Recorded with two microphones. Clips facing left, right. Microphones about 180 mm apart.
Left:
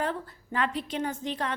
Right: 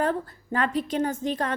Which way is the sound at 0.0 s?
45° right (ahead or behind).